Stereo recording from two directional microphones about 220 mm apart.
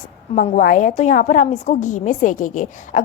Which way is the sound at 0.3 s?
40° left (ahead or behind).